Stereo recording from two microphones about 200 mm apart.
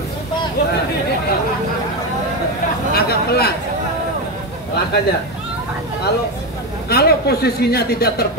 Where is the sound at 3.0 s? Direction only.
50° left (ahead or behind).